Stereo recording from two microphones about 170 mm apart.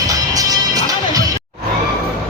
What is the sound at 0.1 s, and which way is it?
Music, 20° right (ahead or behind).